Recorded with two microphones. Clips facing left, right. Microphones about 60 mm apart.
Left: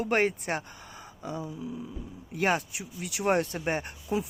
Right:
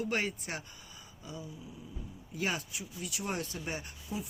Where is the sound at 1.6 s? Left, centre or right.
Left.